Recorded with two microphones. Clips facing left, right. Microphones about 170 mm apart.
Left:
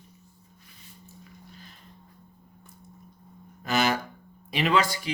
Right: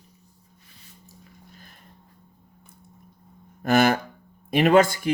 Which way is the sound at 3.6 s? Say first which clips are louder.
Right 6 dB; 50° right (ahead or behind).